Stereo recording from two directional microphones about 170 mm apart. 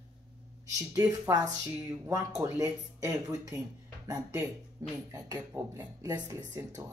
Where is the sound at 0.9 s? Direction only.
20° right (ahead or behind).